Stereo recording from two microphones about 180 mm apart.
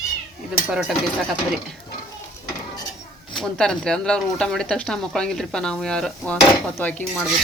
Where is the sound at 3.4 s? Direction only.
5° left (ahead or behind).